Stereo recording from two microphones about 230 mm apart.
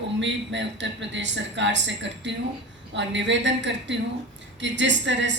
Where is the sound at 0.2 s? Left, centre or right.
Right.